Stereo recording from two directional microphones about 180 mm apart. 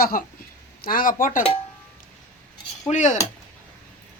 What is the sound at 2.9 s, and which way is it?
Speech, 40° left (ahead or behind).